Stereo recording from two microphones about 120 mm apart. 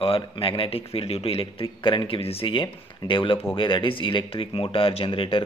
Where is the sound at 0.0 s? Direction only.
50° left (ahead or behind).